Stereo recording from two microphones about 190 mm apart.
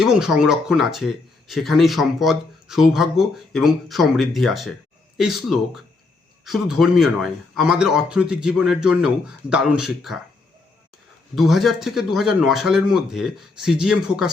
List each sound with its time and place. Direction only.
0.0 s speech: 5° right (ahead or behind)
11.3 s speech: centre (ahead or behind)